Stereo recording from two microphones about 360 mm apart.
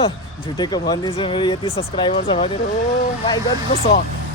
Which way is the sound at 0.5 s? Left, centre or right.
Centre.